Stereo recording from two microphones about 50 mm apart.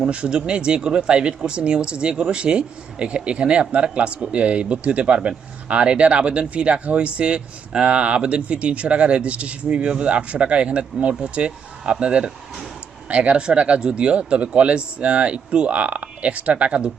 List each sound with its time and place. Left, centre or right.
0.0 s speech: centre